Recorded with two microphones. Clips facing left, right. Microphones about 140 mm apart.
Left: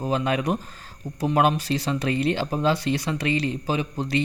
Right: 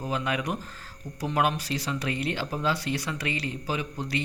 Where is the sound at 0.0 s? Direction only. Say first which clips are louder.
Left 5 dB; 30° left (ahead or behind).